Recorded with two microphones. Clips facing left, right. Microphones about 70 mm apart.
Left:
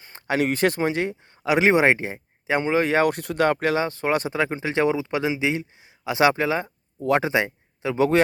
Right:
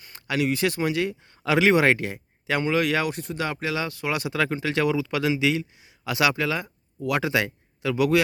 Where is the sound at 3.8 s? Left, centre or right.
Left.